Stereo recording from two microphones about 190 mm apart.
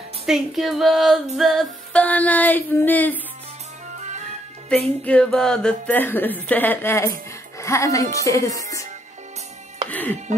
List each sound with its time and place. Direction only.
0.3 s female singing: centre (ahead or behind)
4.7 s female singing: 5° left (ahead or behind)
5.0 s speech: 5° left (ahead or behind)
9.8 s music: 10° left (ahead or behind)